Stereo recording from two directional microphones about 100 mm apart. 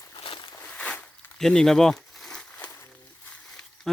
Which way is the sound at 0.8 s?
10° left (ahead or behind).